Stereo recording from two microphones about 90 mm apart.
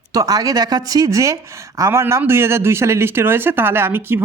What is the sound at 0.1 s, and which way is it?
Speech, 40° right (ahead or behind).